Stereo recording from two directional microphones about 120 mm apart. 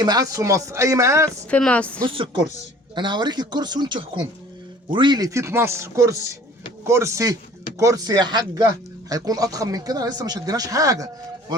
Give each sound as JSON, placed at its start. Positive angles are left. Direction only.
{"t": 0.0, "sound": "speech", "side_deg": -35}
{"t": 1.5, "sound": "speech", "side_deg": 10}
{"t": 2.0, "sound": "speech", "side_deg": -45}